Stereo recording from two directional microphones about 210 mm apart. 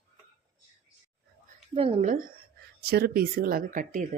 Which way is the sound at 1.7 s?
25° right (ahead or behind).